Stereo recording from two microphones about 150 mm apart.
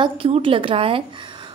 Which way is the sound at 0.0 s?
35° right (ahead or behind).